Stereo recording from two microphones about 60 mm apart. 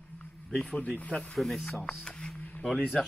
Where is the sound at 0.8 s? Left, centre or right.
Left.